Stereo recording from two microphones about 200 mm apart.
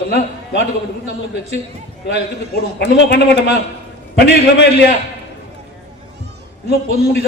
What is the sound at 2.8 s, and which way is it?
A man's voice, 60° left (ahead or behind).